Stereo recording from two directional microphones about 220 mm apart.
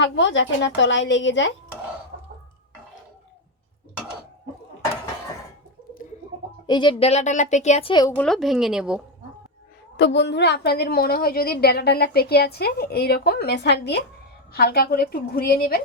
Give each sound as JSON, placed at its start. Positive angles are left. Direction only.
{"t": 0.0, "sound": "a woman's voice", "side_deg": 55}
{"t": 6.7, "sound": "speech", "side_deg": 20}
{"t": 8.2, "sound": "speech", "side_deg": 0}
{"t": 10.0, "sound": "a woman's voice", "side_deg": 55}